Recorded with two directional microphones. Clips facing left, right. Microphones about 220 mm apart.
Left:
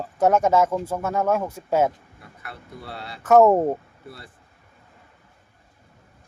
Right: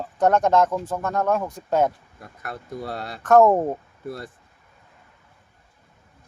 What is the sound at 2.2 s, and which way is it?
Speech, 45° right (ahead or behind).